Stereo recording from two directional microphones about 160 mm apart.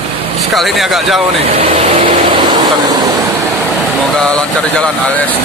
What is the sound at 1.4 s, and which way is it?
Vehicle, 35° right (ahead or behind).